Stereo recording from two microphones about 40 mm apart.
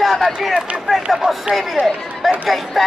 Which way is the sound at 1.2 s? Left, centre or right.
Centre.